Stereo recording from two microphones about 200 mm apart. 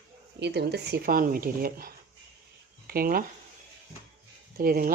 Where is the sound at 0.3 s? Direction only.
55° right (ahead or behind).